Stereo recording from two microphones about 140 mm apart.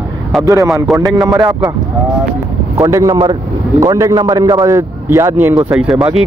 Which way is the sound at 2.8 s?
20° right (ahead or behind).